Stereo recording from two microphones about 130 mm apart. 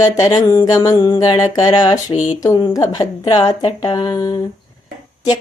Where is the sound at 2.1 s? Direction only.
60° left (ahead or behind).